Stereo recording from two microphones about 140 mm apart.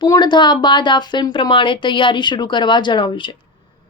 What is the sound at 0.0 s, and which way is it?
Speech, 30° left (ahead or behind).